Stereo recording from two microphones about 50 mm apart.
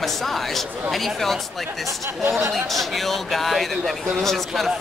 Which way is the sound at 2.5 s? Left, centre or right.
Centre.